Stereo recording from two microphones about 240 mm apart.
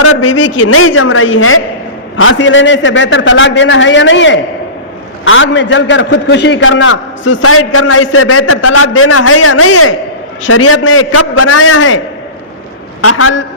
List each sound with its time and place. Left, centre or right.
0.0 s a man's voice: left
13.0 s a man's voice: left